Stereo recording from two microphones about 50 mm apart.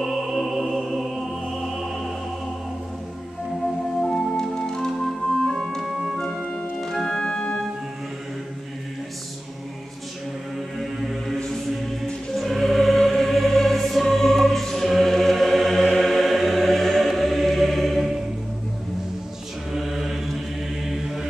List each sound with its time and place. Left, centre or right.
0.0 s music: centre
4.0 s music: centre
5.4 s organ: centre
10.8 s mantra: centre
12.4 s music: centre
19.7 s mantra: centre